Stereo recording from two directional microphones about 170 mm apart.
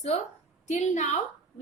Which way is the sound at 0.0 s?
40° left (ahead or behind).